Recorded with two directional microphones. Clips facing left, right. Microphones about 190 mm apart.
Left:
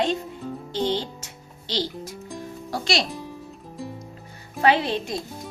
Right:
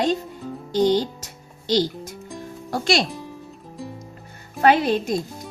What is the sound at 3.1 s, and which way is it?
Music, centre (ahead or behind).